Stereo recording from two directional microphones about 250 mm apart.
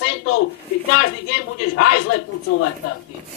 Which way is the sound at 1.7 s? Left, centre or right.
Left.